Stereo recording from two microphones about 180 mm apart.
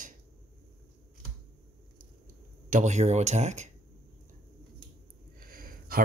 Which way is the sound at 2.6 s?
40° right (ahead or behind).